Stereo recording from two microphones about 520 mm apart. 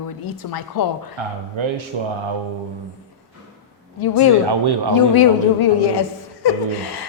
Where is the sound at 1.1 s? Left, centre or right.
Right.